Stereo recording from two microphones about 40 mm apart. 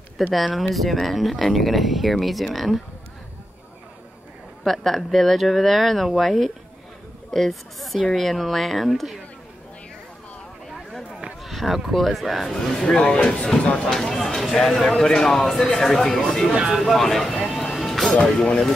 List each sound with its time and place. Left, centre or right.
0.2 s speech: centre
4.6 s speech: centre
11.4 s speech: centre; by 13.8 s left
13.8 s speech: centre
17.4 s music: centre
18.4 s speech: left